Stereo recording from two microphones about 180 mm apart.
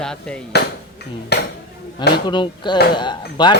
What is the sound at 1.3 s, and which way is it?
Speech, 65° left (ahead or behind).